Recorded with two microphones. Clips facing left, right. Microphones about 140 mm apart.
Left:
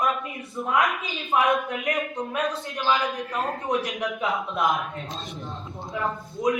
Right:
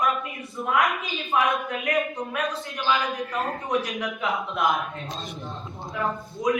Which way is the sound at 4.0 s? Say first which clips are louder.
Left 1 dB; centre (ahead or behind).